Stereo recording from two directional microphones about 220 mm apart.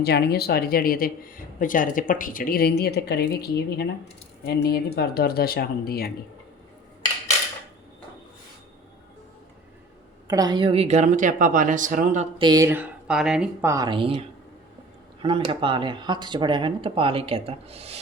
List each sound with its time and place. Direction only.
0.0 s speech: 45° left (ahead or behind)
10.2 s speech: 15° right (ahead or behind); by 12.2 s 35° right (ahead or behind)
12.4 s speech: 15° right (ahead or behind)